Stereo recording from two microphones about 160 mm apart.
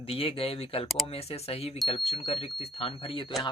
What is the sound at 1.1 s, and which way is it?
Speech, 40° left (ahead or behind).